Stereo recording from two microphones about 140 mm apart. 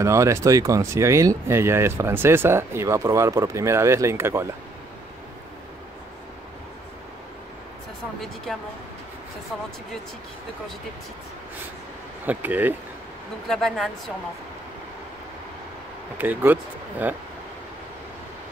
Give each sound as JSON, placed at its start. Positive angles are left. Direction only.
{"t": 0.0, "sound": "speech", "side_deg": -20}
{"t": 12.3, "sound": "speech", "side_deg": -10}
{"t": 13.5, "sound": "speech", "side_deg": 5}
{"t": 16.2, "sound": "speech", "side_deg": -15}